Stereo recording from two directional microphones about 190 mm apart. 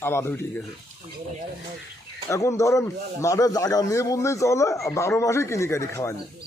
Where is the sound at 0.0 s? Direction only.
10° left (ahead or behind).